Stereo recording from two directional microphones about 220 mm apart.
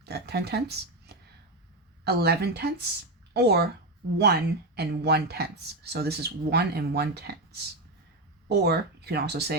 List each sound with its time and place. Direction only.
0.0 s speech: 45° right (ahead or behind)